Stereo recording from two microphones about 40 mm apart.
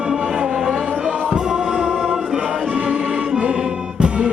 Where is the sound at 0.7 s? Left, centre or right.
Right.